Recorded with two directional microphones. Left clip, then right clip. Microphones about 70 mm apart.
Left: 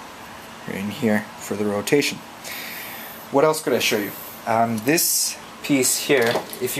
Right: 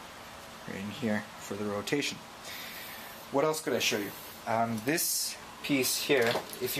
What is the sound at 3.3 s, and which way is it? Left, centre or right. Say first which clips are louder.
Speech: left 11 dB; left.